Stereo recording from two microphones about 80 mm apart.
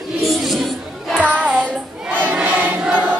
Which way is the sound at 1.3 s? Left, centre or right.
Centre.